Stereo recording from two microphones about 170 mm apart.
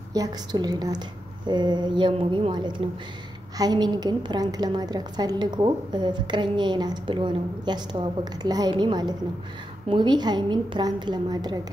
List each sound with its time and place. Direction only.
0.1 s a woman's voice: 25° right (ahead or behind)